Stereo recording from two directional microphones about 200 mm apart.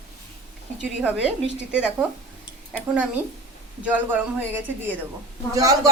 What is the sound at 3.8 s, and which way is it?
A man's voice, 10° right (ahead or behind).